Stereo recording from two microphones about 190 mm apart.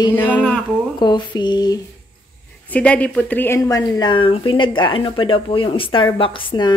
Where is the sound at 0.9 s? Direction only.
25° left (ahead or behind).